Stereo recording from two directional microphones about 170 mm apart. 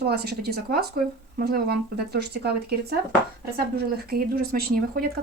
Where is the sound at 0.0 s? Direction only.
70° right (ahead or behind).